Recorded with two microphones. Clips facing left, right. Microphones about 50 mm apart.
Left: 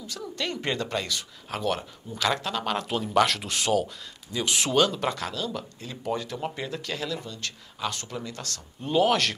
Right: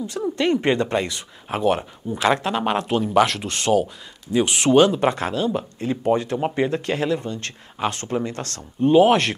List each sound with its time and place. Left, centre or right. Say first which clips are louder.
0.0 s speech: right 11 dB; right
2.9 s speech: right 4 dB; centre
4.3 s speech: right 9 dB; right
8.8 s speech: right 8 dB; right